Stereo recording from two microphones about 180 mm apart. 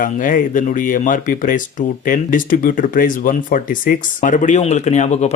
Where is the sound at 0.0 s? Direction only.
45° left (ahead or behind).